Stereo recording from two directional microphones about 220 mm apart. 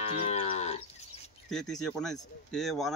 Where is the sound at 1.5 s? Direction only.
Centre (ahead or behind).